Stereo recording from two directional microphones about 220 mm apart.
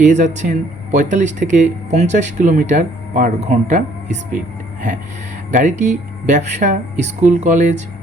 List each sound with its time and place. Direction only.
0.0 s speech: 35° right (ahead or behind)
5.5 s speech: 35° right (ahead or behind)